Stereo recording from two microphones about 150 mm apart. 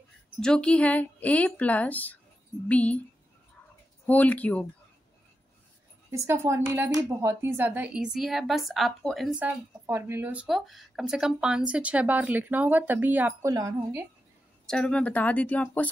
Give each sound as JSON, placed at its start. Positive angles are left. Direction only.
{"t": 0.4, "sound": "a woman's voice", "side_deg": 5}
{"t": 4.0, "sound": "a woman's voice", "side_deg": 10}
{"t": 6.1, "sound": "speech", "side_deg": -15}
{"t": 9.4, "sound": "speech", "side_deg": -15}
{"t": 13.5, "sound": "a woman's voice", "side_deg": -25}
{"t": 14.7, "sound": "a woman's voice", "side_deg": 5}